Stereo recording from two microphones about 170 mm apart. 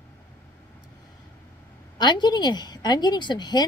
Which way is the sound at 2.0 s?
25° left (ahead or behind).